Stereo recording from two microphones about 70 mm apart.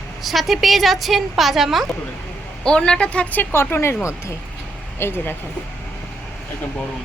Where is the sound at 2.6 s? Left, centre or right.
Centre.